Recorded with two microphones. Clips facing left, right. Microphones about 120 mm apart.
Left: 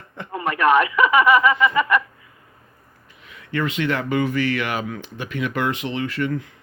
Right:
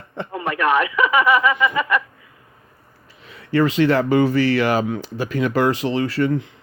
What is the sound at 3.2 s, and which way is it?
Speech, 35° right (ahead or behind).